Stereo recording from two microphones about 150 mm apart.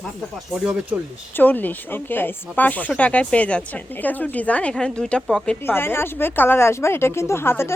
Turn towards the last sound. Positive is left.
turn(degrees=15)  # may be behind; listen again after turning